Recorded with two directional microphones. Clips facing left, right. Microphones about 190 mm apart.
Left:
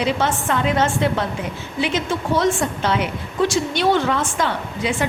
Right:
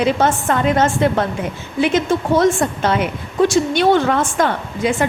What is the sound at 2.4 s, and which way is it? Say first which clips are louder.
A woman's voice: right 4 dB; 50° right (ahead or behind).